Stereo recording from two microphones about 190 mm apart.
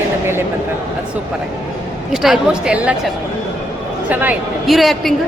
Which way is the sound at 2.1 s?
5° right (ahead or behind).